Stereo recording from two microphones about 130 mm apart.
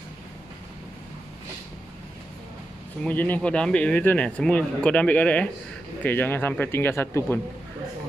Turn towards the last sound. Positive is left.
turn(degrees=15)  # may be behind; listen again after turning